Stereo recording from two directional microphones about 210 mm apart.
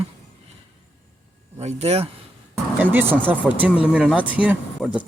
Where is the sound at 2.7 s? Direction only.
10° right (ahead or behind).